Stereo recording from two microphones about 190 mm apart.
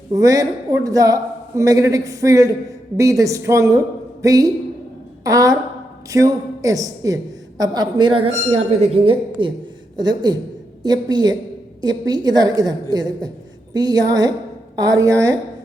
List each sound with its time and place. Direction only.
0.1 s a man's voice: 15° right (ahead or behind)